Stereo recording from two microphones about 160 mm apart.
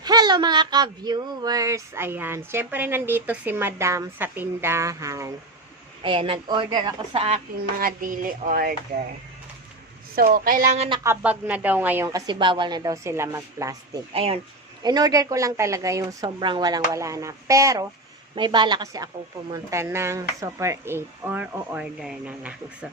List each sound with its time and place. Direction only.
0.0 s speech: 25° right (ahead or behind)
6.0 s a woman's voice: 30° right (ahead or behind)
7.8 s speech: 60° right (ahead or behind)
10.2 s speech: 65° right (ahead or behind)
10.8 s speech: 30° right (ahead or behind)
11.0 s speech: 10° right (ahead or behind)
14.1 s a woman's voice: 35° right (ahead or behind)
14.8 s speech: 25° right (ahead or behind)
18.3 s speech: 30° right (ahead or behind); by 22.9 s 5° right (ahead or behind)